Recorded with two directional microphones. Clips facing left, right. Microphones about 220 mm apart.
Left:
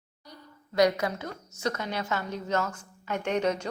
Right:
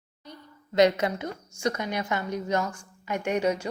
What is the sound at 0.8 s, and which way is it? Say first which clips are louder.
A woman's voice: right 3 dB; 25° right (ahead or behind).